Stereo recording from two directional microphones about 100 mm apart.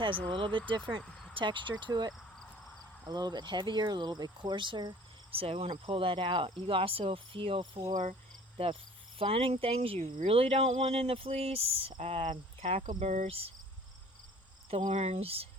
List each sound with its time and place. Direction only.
0.0 s cricket: 55° right (ahead or behind)
0.9 s speech: 55° right (ahead or behind)
2.1 s cricket: 5° left (ahead or behind)
3.1 s speech: 45° right (ahead or behind)
5.3 s cricket: 80° right; by 7.9 s 60° right (ahead or behind)
8.5 s cricket: 70° right (ahead or behind)
14.9 s speech: 90° right